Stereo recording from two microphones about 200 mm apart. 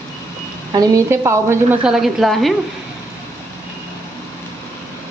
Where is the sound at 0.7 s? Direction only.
15° right (ahead or behind); by 2.5 s centre (ahead or behind).